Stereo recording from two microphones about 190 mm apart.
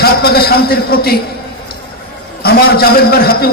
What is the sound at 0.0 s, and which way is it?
A man's voice, 55° left (ahead or behind).